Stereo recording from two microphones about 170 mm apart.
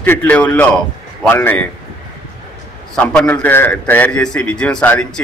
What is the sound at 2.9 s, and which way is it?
A man's voice, 5° left (ahead or behind).